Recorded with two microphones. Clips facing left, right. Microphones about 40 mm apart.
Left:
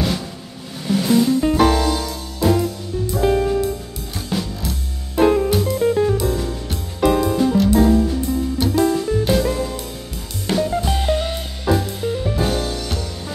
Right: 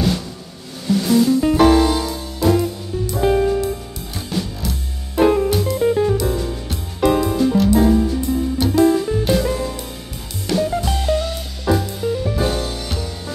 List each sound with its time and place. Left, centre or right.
0.8 s music: centre
1.4 s music: centre
2.4 s music: centre
11.0 s music: left
11.6 s music: centre